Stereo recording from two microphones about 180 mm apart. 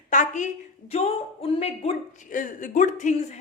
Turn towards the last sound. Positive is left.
turn(degrees=45)  # may be behind; listen again after turning